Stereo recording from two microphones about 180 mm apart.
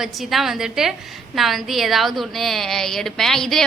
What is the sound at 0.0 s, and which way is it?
A woman's voice, centre (ahead or behind).